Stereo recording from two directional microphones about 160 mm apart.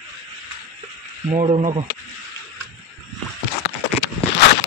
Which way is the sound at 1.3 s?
40° right (ahead or behind).